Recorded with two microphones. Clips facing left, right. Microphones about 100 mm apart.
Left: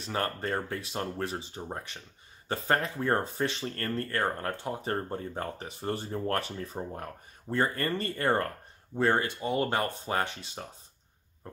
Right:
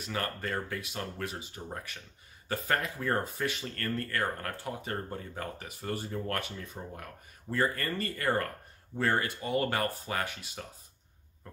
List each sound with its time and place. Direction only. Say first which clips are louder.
0.0 s speech: left 3 dB; 30° left (ahead or behind)